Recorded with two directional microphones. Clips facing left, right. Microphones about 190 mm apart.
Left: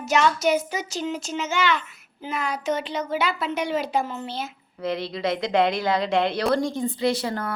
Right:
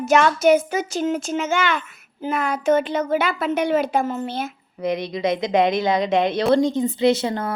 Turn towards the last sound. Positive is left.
turn(degrees=-25)  # may be behind; listen again after turning